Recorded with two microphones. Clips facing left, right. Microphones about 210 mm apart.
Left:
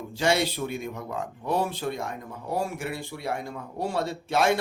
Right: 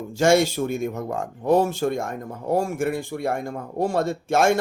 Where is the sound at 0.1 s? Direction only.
45° right (ahead or behind).